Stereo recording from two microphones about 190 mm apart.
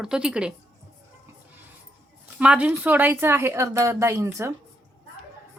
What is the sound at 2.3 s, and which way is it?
A woman's voice, 5° right (ahead or behind).